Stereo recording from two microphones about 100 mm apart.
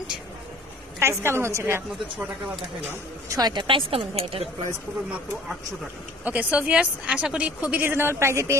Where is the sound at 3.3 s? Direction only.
45° right (ahead or behind).